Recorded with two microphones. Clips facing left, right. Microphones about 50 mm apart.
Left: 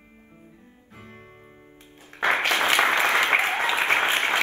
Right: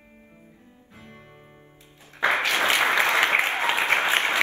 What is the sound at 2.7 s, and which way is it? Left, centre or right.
Applause, left.